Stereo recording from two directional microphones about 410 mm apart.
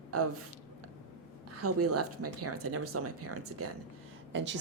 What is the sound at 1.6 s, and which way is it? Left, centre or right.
A woman's voice, right.